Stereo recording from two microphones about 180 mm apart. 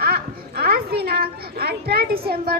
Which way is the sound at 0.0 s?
60° right (ahead or behind).